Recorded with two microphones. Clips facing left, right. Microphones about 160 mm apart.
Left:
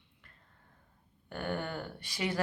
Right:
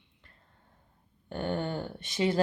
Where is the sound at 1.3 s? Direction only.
25° right (ahead or behind).